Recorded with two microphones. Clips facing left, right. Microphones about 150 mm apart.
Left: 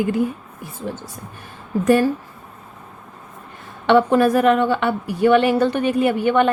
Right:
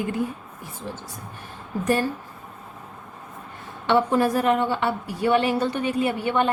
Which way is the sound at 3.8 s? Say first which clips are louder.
Left 5 dB; 85° left.